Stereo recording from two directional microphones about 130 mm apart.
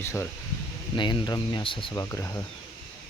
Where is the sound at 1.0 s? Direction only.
35° left (ahead or behind).